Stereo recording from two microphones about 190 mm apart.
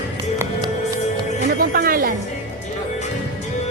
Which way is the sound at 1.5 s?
50° right (ahead or behind).